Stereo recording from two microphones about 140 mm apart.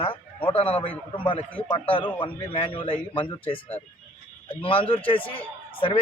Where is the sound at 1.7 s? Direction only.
35° left (ahead or behind).